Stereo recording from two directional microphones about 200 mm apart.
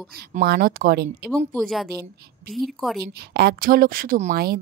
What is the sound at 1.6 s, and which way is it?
Speech, centre (ahead or behind).